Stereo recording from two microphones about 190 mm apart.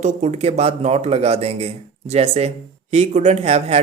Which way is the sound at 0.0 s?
35° right (ahead or behind).